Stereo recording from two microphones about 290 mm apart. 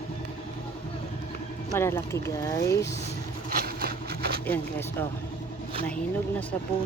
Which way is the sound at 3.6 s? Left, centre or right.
Right.